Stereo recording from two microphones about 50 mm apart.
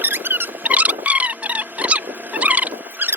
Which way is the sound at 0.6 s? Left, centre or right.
Right.